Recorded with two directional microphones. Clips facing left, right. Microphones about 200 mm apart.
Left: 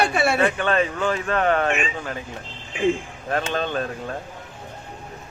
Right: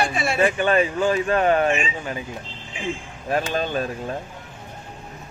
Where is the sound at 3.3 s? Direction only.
10° right (ahead or behind).